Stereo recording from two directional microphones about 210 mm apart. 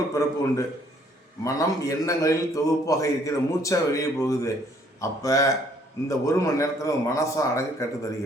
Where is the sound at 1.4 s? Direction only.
15° left (ahead or behind).